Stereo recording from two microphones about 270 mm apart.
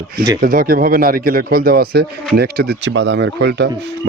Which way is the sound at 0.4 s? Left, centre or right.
Right.